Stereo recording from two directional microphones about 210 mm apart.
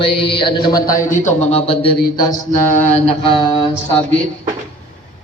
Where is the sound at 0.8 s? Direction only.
40° left (ahead or behind); by 2.4 s 20° left (ahead or behind).